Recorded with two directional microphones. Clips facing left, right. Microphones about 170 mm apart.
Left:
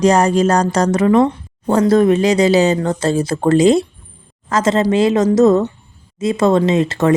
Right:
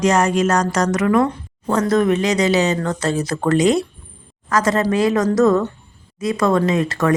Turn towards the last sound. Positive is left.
turn(degrees=25)  # may be behind; listen again after turning